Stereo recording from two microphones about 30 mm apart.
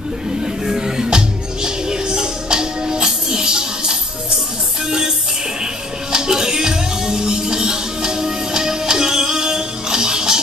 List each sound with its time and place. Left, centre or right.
0.7 s music: centre
6.1 s music: right